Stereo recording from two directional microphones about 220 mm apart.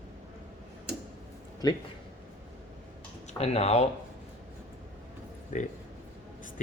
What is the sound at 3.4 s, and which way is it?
Speech, 30° left (ahead or behind).